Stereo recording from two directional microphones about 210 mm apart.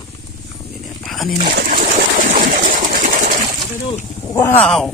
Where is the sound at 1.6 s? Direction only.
40° right (ahead or behind).